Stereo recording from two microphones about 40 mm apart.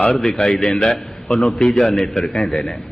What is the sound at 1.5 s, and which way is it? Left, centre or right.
A man's voice, centre.